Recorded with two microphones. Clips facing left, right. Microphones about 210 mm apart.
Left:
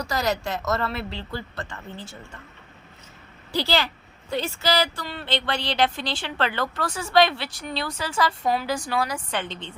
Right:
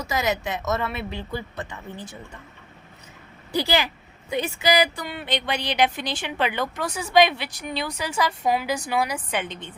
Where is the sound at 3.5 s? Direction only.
15° right (ahead or behind).